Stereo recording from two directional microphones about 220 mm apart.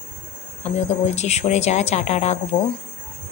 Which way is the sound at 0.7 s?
30° left (ahead or behind).